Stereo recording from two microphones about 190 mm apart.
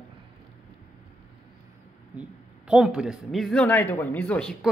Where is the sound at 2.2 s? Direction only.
5° right (ahead or behind).